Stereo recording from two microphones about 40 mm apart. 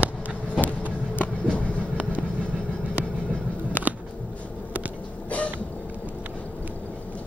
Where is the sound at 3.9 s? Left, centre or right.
Right.